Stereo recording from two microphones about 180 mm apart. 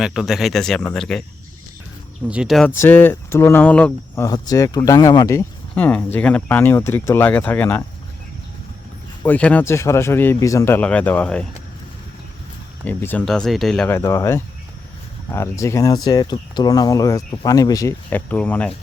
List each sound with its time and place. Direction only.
0.0 s speech: centre (ahead or behind)
2.2 s speech: 5° right (ahead or behind)
2.8 s speech: 10° left (ahead or behind)
9.2 s speech: 10° left (ahead or behind)
12.8 s speech: 10° left (ahead or behind)